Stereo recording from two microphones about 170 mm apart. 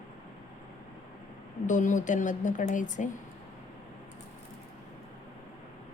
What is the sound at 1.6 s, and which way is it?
A woman's voice, 50° left (ahead or behind).